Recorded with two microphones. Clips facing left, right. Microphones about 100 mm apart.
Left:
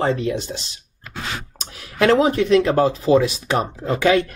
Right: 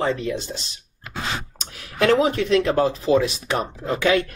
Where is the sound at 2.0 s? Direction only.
30° left (ahead or behind).